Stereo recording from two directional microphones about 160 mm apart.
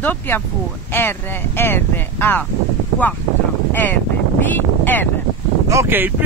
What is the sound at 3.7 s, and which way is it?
Speech, 10° left (ahead or behind).